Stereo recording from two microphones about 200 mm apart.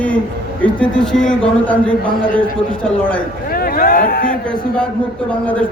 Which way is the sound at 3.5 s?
50° left (ahead or behind).